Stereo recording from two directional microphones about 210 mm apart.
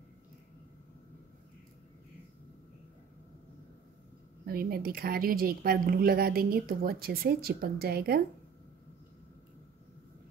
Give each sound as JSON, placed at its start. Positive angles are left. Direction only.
{"t": 4.5, "sound": "a woman's voice", "side_deg": -45}